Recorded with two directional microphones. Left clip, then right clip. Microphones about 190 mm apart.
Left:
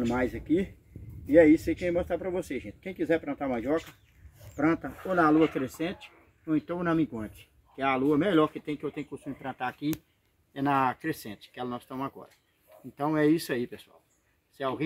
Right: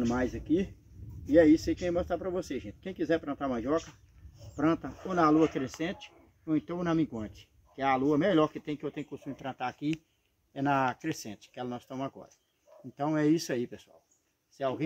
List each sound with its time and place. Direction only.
0.0 s speech: 10° right (ahead or behind); by 11.8 s 25° right (ahead or behind)
12.9 s speech: 20° right (ahead or behind)